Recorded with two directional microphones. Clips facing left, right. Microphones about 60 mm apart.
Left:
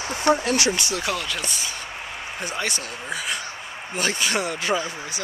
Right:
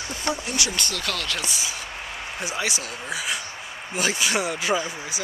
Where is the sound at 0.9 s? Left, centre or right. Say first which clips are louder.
Left 3 dB; centre.